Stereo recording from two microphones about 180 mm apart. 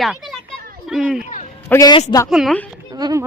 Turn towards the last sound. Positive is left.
turn(degrees=-20)  # may be behind; listen again after turning